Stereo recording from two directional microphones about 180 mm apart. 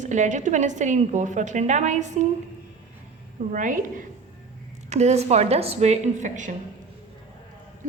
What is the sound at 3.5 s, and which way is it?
A woman's voice, 45° right (ahead or behind).